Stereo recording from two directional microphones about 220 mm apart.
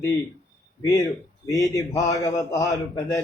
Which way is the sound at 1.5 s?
15° left (ahead or behind).